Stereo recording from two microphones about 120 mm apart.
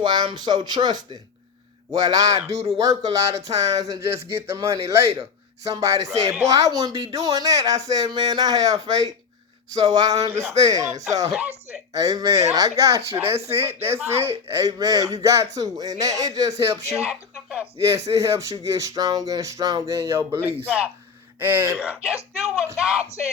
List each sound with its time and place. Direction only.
0.0 s a man's voice: 40° right (ahead or behind)
13.3 s speech: 60° right (ahead or behind)
13.6 s a man's voice: 20° right (ahead or behind)
16.9 s speech: 5° right (ahead or behind)
17.7 s a man's voice: 25° right (ahead or behind)
21.8 s speech: 5° right (ahead or behind)